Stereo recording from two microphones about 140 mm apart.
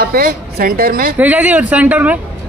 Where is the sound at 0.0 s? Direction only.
90° right.